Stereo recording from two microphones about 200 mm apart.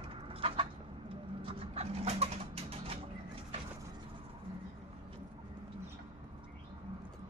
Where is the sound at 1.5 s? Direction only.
30° right (ahead or behind).